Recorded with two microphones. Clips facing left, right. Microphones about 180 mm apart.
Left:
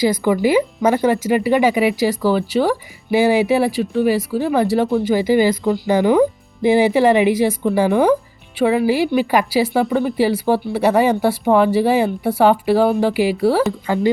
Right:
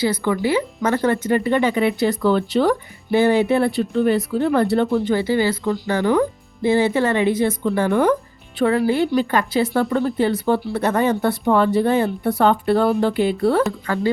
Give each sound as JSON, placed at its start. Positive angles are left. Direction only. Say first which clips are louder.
{"t": 0.0, "sound": "speech", "louder": "left 4 dB", "side_deg": 15}
{"t": 13.8, "sound": "speech", "louder": "left 4 dB", "side_deg": 20}